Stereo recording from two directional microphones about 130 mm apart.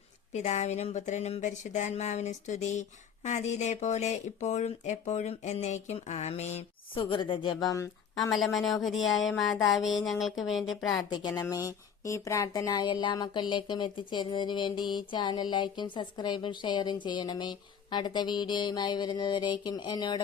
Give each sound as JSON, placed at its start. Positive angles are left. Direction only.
{"t": 0.3, "sound": "speech", "side_deg": 60}
{"t": 6.9, "sound": "a woman's voice", "side_deg": 40}
{"t": 7.6, "sound": "speech", "side_deg": 25}
{"t": 8.3, "sound": "speech", "side_deg": 0}
{"t": 10.9, "sound": "a woman's voice", "side_deg": 35}